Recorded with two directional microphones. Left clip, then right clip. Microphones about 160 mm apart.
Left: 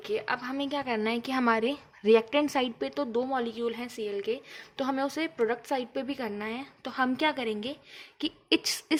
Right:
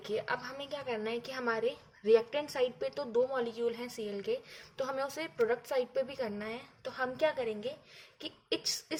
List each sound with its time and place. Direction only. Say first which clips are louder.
0.0 s a woman's voice: left 4 dB; 20° left (ahead or behind)
2.9 s a woman's voice: left 2 dB; 20° left (ahead or behind); by 9.0 s 35° left (ahead or behind)